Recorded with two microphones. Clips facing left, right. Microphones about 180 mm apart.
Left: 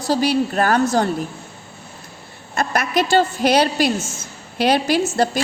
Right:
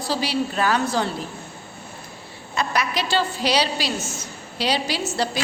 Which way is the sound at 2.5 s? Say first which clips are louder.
Left 5 dB; 50° left (ahead or behind).